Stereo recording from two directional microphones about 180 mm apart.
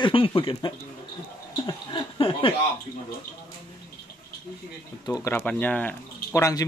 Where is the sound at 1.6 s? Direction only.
25° left (ahead or behind).